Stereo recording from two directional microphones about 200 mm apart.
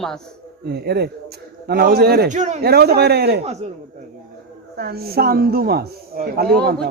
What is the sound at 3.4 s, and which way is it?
Speech, 35° right (ahead or behind).